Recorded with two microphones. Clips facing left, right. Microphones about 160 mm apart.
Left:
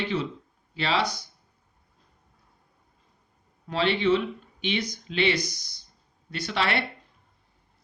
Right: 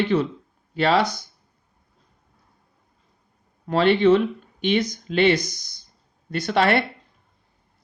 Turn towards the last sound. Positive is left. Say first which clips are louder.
# right 8 dB
turn(degrees=-50)  # may be behind; listen again after turning